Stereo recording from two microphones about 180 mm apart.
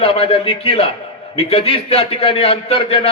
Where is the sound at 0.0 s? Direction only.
35° left (ahead or behind).